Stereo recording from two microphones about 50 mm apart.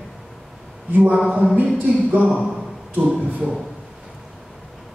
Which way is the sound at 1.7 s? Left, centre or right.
Right.